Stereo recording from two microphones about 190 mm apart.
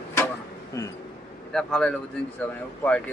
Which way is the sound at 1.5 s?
5° left (ahead or behind).